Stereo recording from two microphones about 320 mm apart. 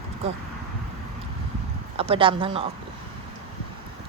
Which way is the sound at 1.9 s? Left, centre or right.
Centre.